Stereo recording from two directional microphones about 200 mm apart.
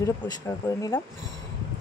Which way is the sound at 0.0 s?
20° left (ahead or behind).